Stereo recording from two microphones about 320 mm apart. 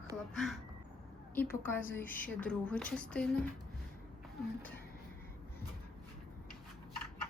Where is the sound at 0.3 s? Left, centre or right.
Centre.